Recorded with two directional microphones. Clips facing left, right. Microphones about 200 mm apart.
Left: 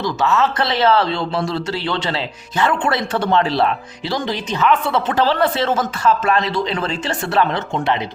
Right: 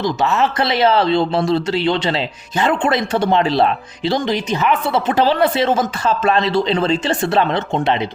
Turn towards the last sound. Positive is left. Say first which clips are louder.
# right 2 dB
turn(degrees=-20)  # may be behind; listen again after turning